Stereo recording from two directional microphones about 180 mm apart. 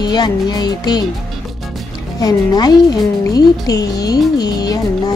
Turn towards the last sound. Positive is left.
turn(degrees=20)  # may be behind; listen again after turning